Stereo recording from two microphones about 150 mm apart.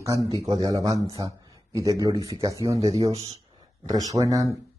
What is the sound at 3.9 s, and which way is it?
Speech, 25° right (ahead or behind).